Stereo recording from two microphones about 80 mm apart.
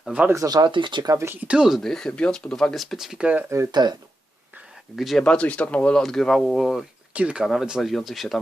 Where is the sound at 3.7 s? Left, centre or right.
Right.